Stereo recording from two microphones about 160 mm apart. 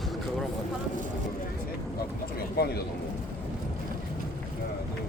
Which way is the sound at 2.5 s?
80° left.